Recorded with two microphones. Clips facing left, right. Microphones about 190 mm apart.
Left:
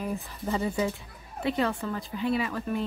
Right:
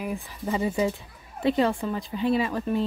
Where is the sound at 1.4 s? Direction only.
25° right (ahead or behind).